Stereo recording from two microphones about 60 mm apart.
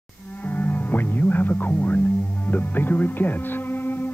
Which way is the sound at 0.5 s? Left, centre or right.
Left.